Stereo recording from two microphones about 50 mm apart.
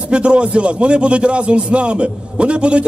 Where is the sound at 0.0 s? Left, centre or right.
Right.